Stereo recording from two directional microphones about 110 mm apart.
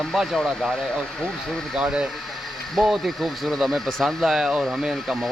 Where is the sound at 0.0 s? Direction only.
Centre (ahead or behind).